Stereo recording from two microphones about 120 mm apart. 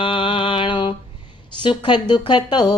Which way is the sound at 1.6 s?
40° left (ahead or behind).